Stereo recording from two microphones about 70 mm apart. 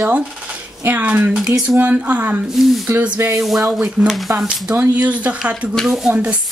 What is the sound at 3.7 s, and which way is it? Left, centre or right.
Speech, centre.